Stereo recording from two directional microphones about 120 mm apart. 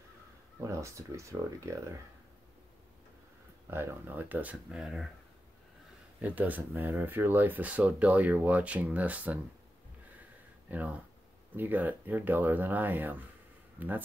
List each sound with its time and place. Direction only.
0.6 s speech: 25° right (ahead or behind)
3.7 s speech: 15° right (ahead or behind)
6.2 s speech: 15° right (ahead or behind)
10.7 s speech: 15° right (ahead or behind)